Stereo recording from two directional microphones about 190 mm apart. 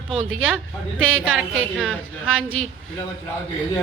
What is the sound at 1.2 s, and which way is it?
A woman's voice, 5° right (ahead or behind).